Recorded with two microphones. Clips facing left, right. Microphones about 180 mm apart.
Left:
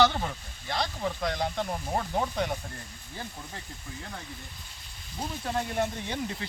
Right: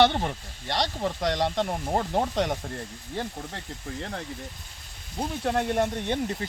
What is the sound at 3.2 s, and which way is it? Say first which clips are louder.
Speech: right 7 dB; 65° right (ahead or behind).